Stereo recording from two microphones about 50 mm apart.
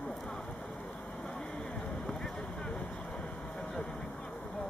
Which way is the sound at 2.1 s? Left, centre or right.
Centre.